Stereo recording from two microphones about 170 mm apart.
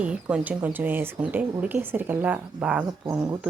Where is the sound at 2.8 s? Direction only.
20° right (ahead or behind).